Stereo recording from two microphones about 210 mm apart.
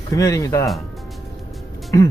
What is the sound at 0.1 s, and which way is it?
Speech, 15° left (ahead or behind).